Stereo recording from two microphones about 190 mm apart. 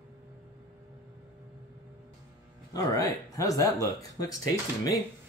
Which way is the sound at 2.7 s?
15° left (ahead or behind).